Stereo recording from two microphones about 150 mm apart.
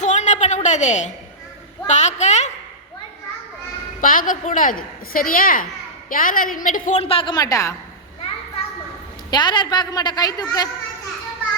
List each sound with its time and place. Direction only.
0.0 s a sound: 50° left (ahead or behind)
1.9 s a woman's voice: 50° left (ahead or behind)
4.0 s a woman's voice: 65° left (ahead or behind)
7.0 s a woman's voice: 40° left (ahead or behind); by 7.8 s 20° left (ahead or behind)
9.3 s a woman's voice: 30° left (ahead or behind)